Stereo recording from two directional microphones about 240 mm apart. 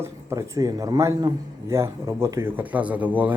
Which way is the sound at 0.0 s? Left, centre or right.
Centre.